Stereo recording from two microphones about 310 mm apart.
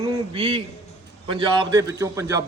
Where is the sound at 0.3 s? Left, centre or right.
Centre.